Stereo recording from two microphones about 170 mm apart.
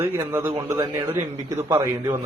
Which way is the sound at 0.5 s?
20° right (ahead or behind).